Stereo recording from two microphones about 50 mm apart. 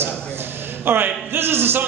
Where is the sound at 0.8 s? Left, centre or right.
Right.